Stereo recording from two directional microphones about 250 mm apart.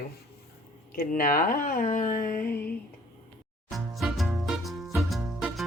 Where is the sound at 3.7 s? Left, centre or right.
Centre.